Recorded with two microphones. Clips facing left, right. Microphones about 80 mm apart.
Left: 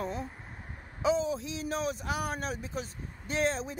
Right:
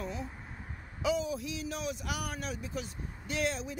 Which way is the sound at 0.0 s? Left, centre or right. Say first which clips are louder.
Left 3 dB; left.